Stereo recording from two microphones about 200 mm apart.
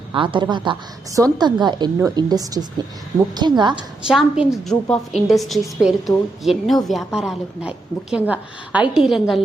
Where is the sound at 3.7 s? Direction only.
5° right (ahead or behind).